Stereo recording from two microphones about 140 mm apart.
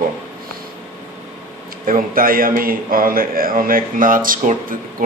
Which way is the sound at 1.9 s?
85° right.